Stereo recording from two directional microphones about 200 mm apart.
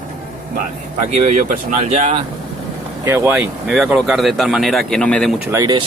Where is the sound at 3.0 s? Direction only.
15° right (ahead or behind).